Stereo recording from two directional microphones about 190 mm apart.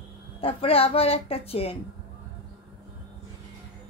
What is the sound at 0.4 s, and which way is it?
A child's voice, 30° left (ahead or behind).